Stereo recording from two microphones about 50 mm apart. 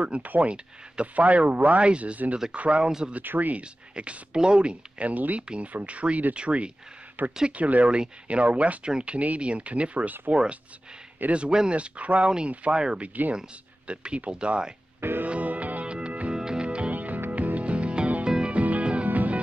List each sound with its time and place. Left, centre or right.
0.0 s speech: right
3.3 s speech: right
3.9 s speech: right
7.2 s speech: right; by 14.7 s centre
15.0 s music: right
15.2 s music: right
16.9 s music: right